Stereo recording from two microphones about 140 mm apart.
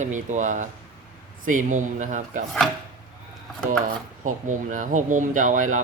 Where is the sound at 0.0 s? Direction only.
60° right (ahead or behind).